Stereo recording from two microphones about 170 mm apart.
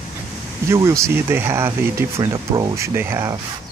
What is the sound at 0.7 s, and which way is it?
Speech, 15° right (ahead or behind).